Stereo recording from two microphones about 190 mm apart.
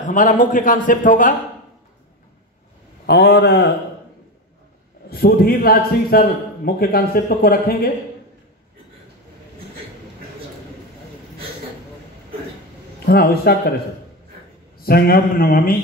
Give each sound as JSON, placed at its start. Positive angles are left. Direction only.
{"t": 0.0, "sound": "a man's voice", "side_deg": 40}
{"t": 3.1, "sound": "a man's voice", "side_deg": 60}
{"t": 5.1, "sound": "a man's voice", "side_deg": 55}
{"t": 13.0, "sound": "a man's voice", "side_deg": 55}
{"t": 14.8, "sound": "a man's voice", "side_deg": 50}